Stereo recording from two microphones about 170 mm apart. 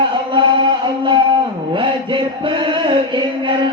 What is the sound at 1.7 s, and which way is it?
Chant, 30° right (ahead or behind).